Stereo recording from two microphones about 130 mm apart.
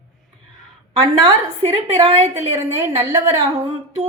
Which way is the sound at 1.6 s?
50° right (ahead or behind).